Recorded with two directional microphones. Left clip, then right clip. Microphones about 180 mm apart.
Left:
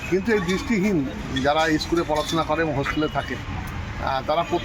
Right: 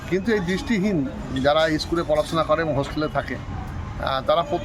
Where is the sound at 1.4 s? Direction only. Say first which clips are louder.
Right 1 dB; 25° right (ahead or behind).